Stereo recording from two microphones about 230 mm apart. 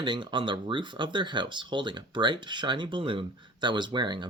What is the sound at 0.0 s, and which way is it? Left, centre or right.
Speech, centre.